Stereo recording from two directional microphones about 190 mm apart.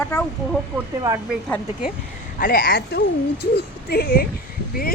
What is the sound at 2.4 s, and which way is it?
Speech, 50° left (ahead or behind).